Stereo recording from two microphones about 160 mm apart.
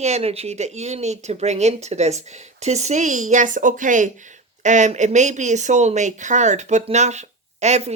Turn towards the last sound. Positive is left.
turn(degrees=-45)  # may be behind; listen again after turning